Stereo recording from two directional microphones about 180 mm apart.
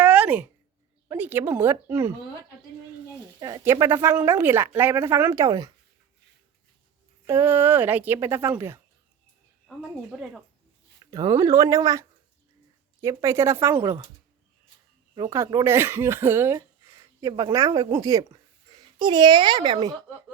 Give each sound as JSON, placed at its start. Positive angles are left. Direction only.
{"t": 0.0, "sound": "a sound", "side_deg": -10}
{"t": 1.0, "sound": "speech", "side_deg": -10}
{"t": 3.4, "sound": "speech", "side_deg": -15}
{"t": 7.3, "sound": "speech", "side_deg": -15}
{"t": 9.6, "sound": "speech", "side_deg": 0}
{"t": 11.0, "sound": "speech", "side_deg": -20}
{"t": 15.1, "sound": "a child's voice", "side_deg": -20}